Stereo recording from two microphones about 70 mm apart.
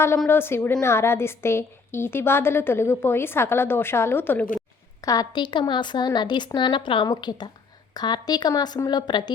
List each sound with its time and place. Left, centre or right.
0.3 s a woman's voice: left
5.0 s a woman's voice: left
8.9 s a woman's voice: left